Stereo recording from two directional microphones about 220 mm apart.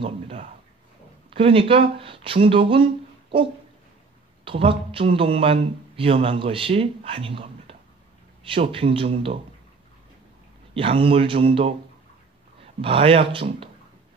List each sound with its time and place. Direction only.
0.0 s a sound: 25° right (ahead or behind)
1.3 s speech: 25° right (ahead or behind)
4.5 s speech: 25° right (ahead or behind)
10.7 s speech: 25° right (ahead or behind)
12.8 s speech: 25° right (ahead or behind)